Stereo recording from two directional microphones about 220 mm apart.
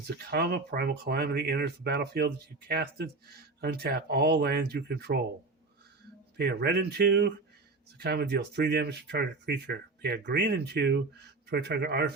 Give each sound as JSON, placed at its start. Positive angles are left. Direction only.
{"t": 0.3, "sound": "speech", "side_deg": -45}
{"t": 6.3, "sound": "speech", "side_deg": -50}